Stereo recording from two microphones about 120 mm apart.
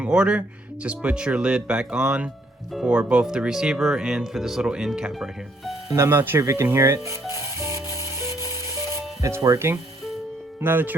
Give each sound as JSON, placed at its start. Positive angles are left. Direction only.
{"t": 0.0, "sound": "speech", "side_deg": -10}
{"t": 5.9, "sound": "speech", "side_deg": -25}
{"t": 7.4, "sound": "music", "side_deg": -25}
{"t": 9.2, "sound": "speech", "side_deg": -25}